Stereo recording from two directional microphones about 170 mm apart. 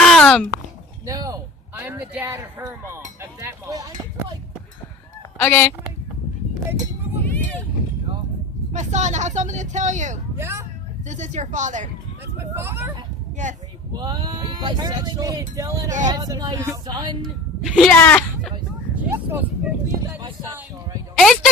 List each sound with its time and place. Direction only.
0.0 s a sound: 5° left (ahead or behind)
1.0 s a man's voice: 20° right (ahead or behind)
5.4 s speech: 10° left (ahead or behind)
7.3 s speech: 10° left (ahead or behind)
8.7 s speech: 45° right (ahead or behind)
10.3 s speech: 15° right (ahead or behind)
11.1 s speech: 45° right (ahead or behind)
12.4 s a man's voice: 15° right (ahead or behind)
13.3 s speech: 45° right (ahead or behind)
13.9 s speech: 25° right (ahead or behind)
17.2 s speech: centre (ahead or behind)
19.0 s a man's voice: 15° right (ahead or behind)
21.2 s speech: centre (ahead or behind)